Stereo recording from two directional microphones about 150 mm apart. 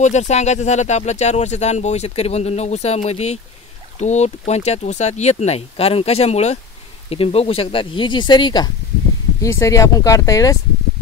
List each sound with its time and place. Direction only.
0.0 s speech: 50° left (ahead or behind); by 10.6 s 20° left (ahead or behind)